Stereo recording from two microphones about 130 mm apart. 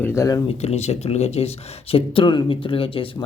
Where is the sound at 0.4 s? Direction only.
55° left (ahead or behind).